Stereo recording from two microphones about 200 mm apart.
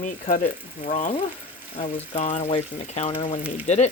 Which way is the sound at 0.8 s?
30° left (ahead or behind).